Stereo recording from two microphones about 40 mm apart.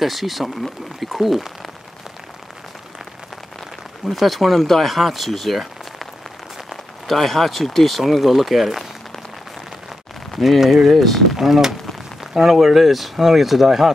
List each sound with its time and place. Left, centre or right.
0.0 s speech: centre
4.1 s speech: centre
7.1 s speech: centre
10.3 s speech: centre
11.0 s speech: centre
11.3 s speech: centre